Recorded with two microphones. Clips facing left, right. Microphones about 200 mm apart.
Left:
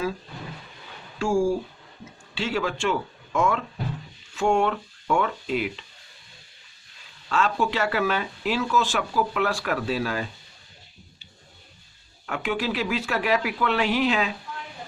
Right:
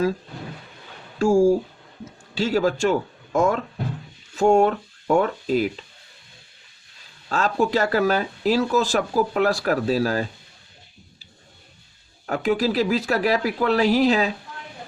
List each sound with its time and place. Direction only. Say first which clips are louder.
1.2 s speech: right 6 dB; 40° right (ahead or behind)
7.3 s speech: right 3 dB; 40° right (ahead or behind)
12.2 s speech: right 6 dB; 40° right (ahead or behind)